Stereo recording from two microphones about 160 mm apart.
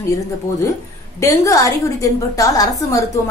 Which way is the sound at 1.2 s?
20° left (ahead or behind).